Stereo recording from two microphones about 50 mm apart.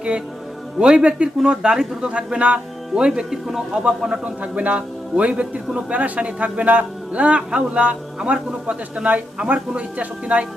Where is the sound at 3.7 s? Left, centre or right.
Centre.